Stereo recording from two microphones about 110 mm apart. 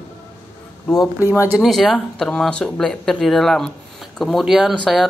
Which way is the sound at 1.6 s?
Centre (ahead or behind).